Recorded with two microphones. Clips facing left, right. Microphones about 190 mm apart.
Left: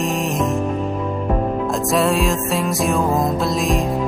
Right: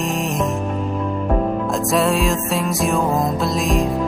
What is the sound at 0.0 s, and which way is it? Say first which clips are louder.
Music: left 1 dB; centre (ahead or behind).